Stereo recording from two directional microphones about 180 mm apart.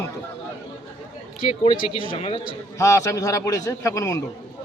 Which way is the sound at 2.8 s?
15° left (ahead or behind).